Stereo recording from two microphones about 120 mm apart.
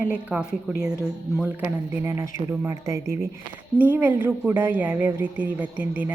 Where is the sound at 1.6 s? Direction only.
15° right (ahead or behind).